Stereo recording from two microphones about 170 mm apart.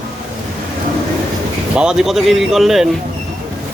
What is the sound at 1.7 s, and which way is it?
Speech, 5° right (ahead or behind).